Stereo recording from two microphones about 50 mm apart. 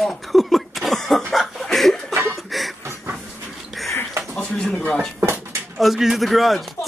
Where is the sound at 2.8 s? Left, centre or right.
Right.